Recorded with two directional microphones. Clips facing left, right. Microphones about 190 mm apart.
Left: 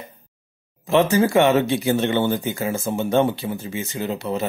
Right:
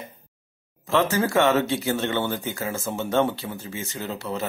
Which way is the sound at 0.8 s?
15° left (ahead or behind).